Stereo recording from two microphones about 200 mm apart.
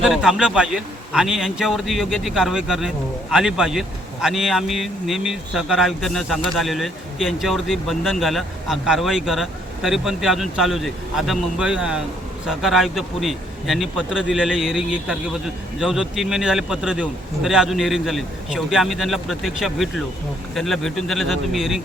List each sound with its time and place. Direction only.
0.0 s speech: centre (ahead or behind)